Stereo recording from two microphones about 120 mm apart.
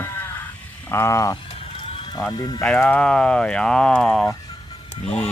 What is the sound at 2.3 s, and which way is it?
Speech, 40° left (ahead or behind).